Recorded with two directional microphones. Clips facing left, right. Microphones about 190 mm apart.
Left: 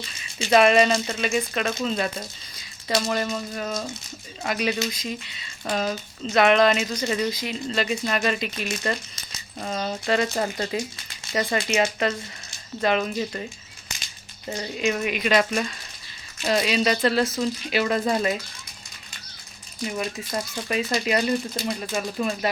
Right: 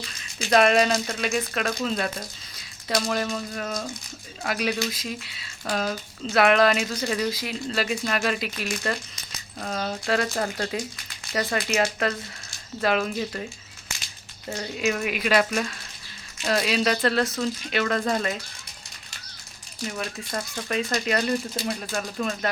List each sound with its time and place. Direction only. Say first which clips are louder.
0.5 s speech: left 2 dB; centre (ahead or behind)
11.3 s a sound: left 2 dB; 25° left (ahead or behind)
11.7 s speech: left 1 dB; centre (ahead or behind)
19.8 s speech: left 3 dB; 15° left (ahead or behind)